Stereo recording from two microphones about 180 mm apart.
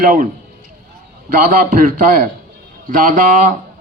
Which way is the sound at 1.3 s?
50° right (ahead or behind).